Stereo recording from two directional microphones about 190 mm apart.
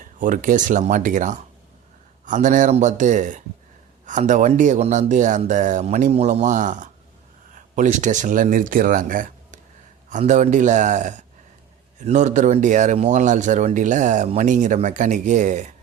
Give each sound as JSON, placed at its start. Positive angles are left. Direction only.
{"t": 0.0, "sound": "speech", "side_deg": -45}